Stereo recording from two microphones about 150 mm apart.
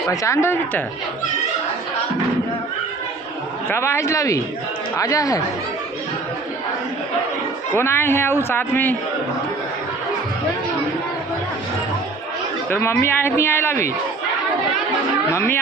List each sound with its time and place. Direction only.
0.1 s speech: 20° left (ahead or behind)
3.7 s speech: 15° left (ahead or behind)
7.7 s a man's voice: 15° left (ahead or behind)
12.7 s a man's voice: 15° left (ahead or behind)
15.3 s a man's voice: 15° left (ahead or behind)